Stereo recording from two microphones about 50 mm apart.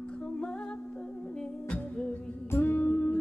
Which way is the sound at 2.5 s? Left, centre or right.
Left.